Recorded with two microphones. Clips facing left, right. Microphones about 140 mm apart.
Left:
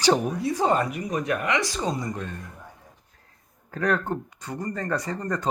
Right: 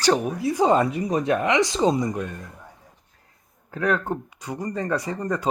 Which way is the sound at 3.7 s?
5° right (ahead or behind).